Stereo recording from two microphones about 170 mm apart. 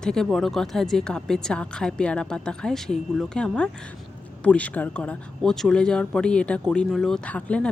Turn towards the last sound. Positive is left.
turn(degrees=5)  # may be behind; listen again after turning